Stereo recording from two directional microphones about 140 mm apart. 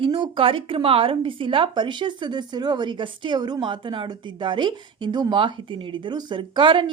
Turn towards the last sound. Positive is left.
turn(degrees=-35)  # may be behind; listen again after turning